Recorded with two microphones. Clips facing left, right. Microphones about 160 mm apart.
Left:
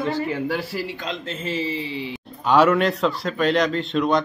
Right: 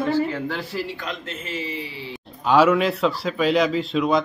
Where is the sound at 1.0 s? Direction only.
30° left (ahead or behind).